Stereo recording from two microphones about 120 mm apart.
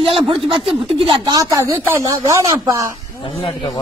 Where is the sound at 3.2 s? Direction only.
50° left (ahead or behind).